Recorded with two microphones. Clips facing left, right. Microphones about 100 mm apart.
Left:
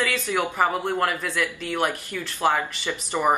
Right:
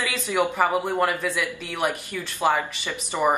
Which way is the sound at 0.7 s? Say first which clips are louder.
Right 1 dB; 10° right (ahead or behind).